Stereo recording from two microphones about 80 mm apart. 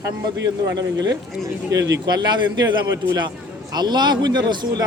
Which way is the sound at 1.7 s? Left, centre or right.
Right.